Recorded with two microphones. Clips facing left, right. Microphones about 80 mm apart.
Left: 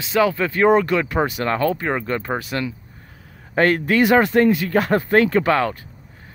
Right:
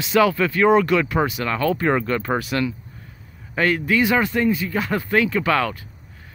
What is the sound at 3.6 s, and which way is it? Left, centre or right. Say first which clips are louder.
Speech: left 3 dB; left.